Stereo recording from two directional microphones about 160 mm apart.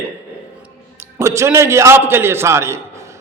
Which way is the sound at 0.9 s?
20° right (ahead or behind).